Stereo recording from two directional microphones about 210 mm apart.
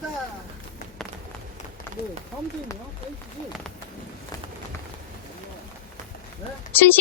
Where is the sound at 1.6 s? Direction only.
35° left (ahead or behind).